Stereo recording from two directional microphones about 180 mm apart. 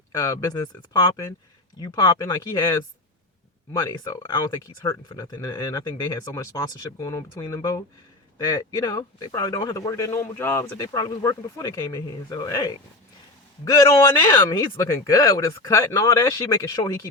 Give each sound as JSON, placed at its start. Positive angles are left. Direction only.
{"t": 0.1, "sound": "a man's voice", "side_deg": 20}